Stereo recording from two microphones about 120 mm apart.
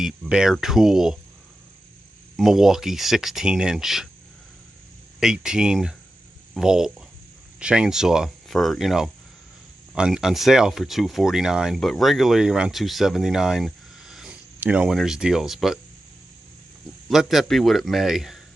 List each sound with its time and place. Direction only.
0.0 s speech: 5° right (ahead or behind)
2.3 s speech: centre (ahead or behind)
5.2 s speech: 5° right (ahead or behind)
17.1 s speech: 5° right (ahead or behind)